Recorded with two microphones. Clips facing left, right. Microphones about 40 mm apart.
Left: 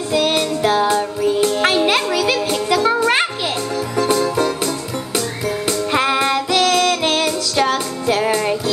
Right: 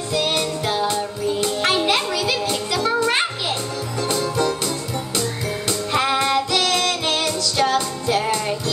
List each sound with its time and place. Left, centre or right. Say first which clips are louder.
0.1 s music: left 4 dB; centre
1.9 s music: left 4 dB; left
4.0 s music: left 4 dB; left
5.7 s music: left 3 dB; centre
6.8 s music: left 5 dB; left